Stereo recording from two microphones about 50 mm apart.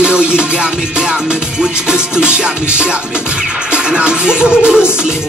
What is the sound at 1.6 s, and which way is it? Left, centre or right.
Music, centre.